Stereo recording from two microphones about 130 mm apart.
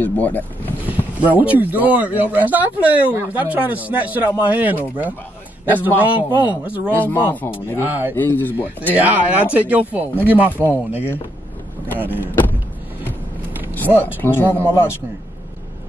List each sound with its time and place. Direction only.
0.0 s speech: 15° left (ahead or behind)
0.8 s speech: 10° right (ahead or behind)
6.9 s speech: 15° left (ahead or behind)
7.8 s speech: 15° right (ahead or behind)
8.2 s speech: 15° left (ahead or behind)
8.8 s speech: 10° right (ahead or behind)
12.2 s speech: 15° left (ahead or behind)
14.0 s speech: 15° left (ahead or behind)